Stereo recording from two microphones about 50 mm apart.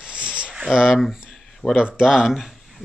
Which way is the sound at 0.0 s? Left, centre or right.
Right.